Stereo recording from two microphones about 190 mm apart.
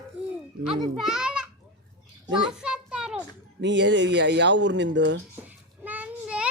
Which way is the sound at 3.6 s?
70° right (ahead or behind).